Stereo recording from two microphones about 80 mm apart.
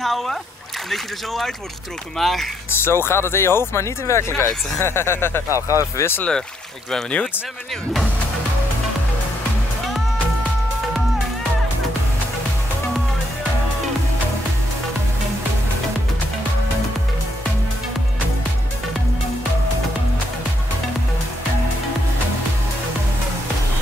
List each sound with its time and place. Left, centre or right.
0.0 s speech: centre
2.8 s speech: left
5.5 s speech: right
5.9 s speech: left
6.9 s speech: centre